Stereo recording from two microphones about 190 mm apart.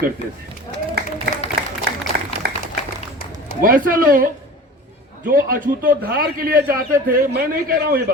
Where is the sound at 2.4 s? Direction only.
55° right (ahead or behind).